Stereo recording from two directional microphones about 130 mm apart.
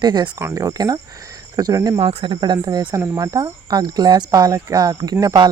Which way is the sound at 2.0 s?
45° right (ahead or behind).